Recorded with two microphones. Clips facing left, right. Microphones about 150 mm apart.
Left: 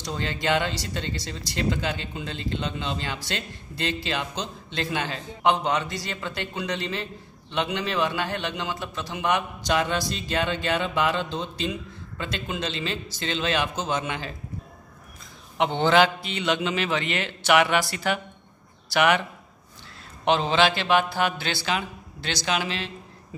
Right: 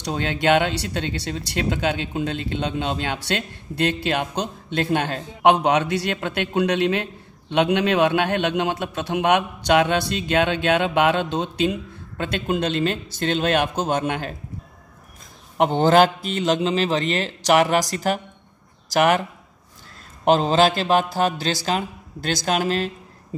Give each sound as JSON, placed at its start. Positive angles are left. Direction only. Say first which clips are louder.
{"t": 0.0, "sound": "speech", "louder": "right 6 dB", "side_deg": -65}
{"t": 15.5, "sound": "a man's voice", "louder": "right 4 dB", "side_deg": -40}
{"t": 20.2, "sound": "a man's voice", "louder": "right 4 dB", "side_deg": -40}